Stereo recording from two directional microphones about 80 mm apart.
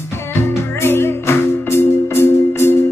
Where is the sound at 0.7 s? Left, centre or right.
Left.